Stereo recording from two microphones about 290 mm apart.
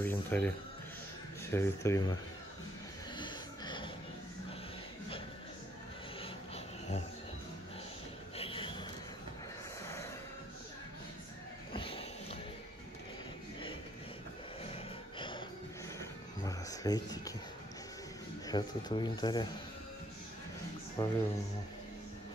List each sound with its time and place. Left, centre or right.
0.0 s speech: centre
3.2 s music: centre
6.2 s a sound: left
8.4 s a sound: centre
11.7 s music: centre
14.6 s gasp: centre
16.0 s a sound: centre
18.5 s speech: centre
21.0 s speech: centre